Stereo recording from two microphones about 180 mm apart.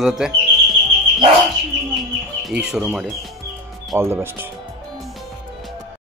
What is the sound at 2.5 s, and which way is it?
Speech, 5° right (ahead or behind).